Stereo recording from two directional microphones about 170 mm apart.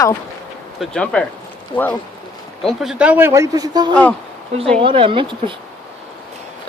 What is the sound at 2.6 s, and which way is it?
Speech, centre (ahead or behind).